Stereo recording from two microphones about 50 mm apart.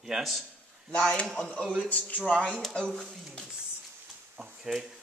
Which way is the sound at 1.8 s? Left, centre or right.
Left.